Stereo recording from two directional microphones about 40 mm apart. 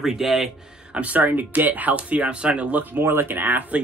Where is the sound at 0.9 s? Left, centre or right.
Right.